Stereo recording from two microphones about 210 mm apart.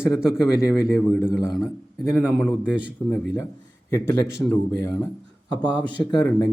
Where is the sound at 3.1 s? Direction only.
15° left (ahead or behind).